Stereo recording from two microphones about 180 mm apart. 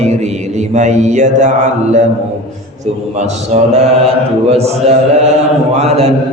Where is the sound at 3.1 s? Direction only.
40° right (ahead or behind).